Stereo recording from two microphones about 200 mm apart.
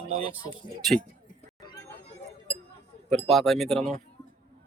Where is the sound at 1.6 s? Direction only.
20° left (ahead or behind).